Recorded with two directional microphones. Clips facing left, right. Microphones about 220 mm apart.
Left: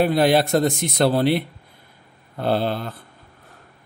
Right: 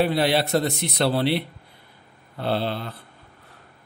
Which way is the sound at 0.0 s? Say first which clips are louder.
Left 4 dB; 50° left (ahead or behind).